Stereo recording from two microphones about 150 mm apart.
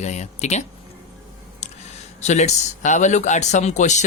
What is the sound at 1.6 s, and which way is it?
Speech, 50° left (ahead or behind).